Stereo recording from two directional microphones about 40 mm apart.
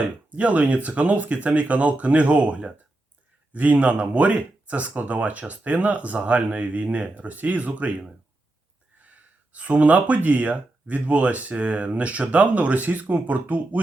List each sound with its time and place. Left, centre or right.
0.3 s speech: right
9.1 s a sound: right
10.2 s speech: right